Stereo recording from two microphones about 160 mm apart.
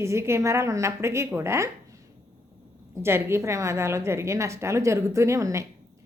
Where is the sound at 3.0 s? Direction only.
15° right (ahead or behind).